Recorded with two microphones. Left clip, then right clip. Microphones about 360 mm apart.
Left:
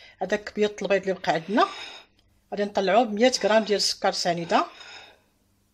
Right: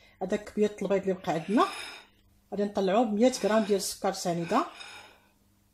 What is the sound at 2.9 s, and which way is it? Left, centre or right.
Speech, left.